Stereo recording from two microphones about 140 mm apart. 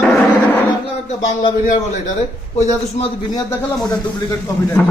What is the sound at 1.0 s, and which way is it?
Speech, 40° left (ahead or behind).